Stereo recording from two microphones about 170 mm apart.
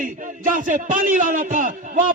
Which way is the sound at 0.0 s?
50° right (ahead or behind).